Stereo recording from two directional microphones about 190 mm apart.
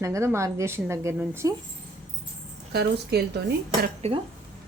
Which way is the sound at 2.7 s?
55° right (ahead or behind).